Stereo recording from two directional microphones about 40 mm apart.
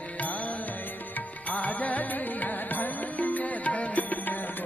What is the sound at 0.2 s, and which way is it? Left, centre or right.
Music, left.